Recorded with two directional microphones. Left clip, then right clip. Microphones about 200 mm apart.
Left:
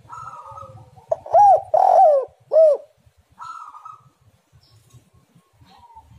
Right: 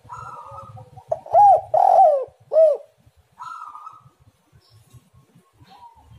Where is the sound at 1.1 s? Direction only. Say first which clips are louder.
Even; 25° left (ahead or behind).